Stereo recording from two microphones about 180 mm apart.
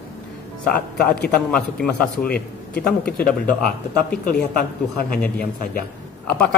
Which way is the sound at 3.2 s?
50° left (ahead or behind).